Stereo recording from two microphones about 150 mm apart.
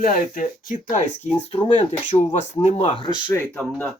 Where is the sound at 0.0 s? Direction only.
65° left (ahead or behind); by 2.9 s 50° left (ahead or behind).